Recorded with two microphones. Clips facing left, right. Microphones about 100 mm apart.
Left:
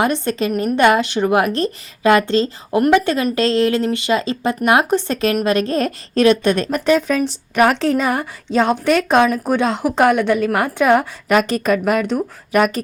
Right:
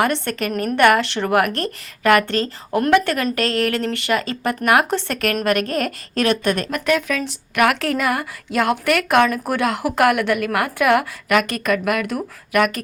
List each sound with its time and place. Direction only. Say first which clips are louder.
0.0 s a woman's voice: left 2 dB; 20° left (ahead or behind)